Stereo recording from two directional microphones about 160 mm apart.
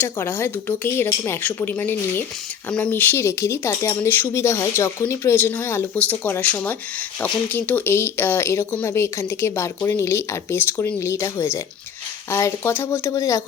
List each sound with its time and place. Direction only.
0.0 s speech: 15° left (ahead or behind)